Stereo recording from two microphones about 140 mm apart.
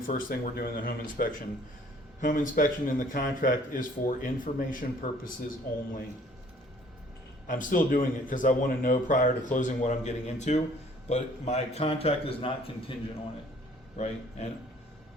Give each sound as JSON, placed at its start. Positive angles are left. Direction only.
{"t": 0.0, "sound": "speech", "side_deg": 80}
{"t": 7.4, "sound": "a man's voice", "side_deg": 70}
{"t": 13.9, "sound": "a man's voice", "side_deg": 50}